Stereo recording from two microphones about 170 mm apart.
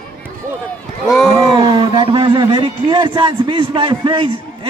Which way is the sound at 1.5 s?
25° right (ahead or behind).